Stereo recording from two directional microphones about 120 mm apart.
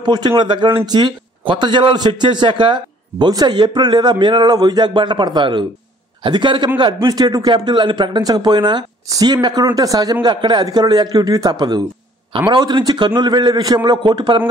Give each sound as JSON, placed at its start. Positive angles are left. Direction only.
{"t": 0.0, "sound": "a man's voice", "side_deg": -40}